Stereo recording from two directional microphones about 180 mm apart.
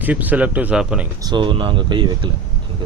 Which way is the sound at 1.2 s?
25° right (ahead or behind).